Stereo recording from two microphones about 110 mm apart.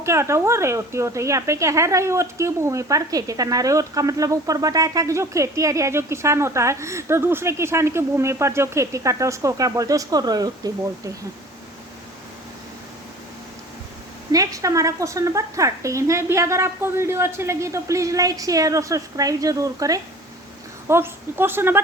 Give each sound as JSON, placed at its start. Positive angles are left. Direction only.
{"t": 0.0, "sound": "speech", "side_deg": -25}
{"t": 14.3, "sound": "speech", "side_deg": -30}